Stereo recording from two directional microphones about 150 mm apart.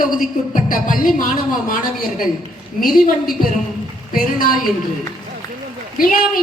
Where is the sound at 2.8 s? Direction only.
70° left (ahead or behind).